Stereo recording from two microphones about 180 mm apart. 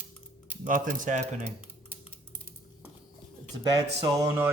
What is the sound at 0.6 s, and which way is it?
Speech, 45° right (ahead or behind).